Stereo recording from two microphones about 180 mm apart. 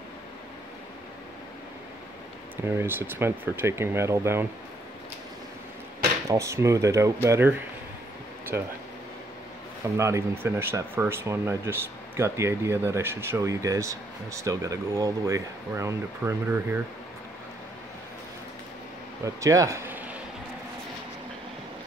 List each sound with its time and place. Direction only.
2.5 s speech: 15° right (ahead or behind)
6.2 s speech: 15° right (ahead or behind)
9.9 s speech: 15° right (ahead or behind)
19.2 s speech: 20° right (ahead or behind)